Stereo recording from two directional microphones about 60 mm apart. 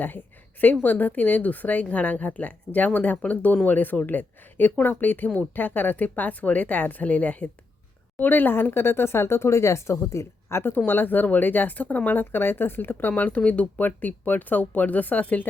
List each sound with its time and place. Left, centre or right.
0.6 s speech: left